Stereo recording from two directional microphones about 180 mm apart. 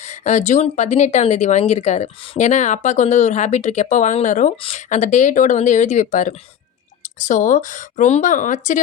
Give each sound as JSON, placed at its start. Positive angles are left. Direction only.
{"t": 0.0, "sound": "speech", "side_deg": 40}